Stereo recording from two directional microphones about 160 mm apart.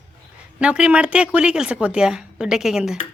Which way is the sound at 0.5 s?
5° right (ahead or behind).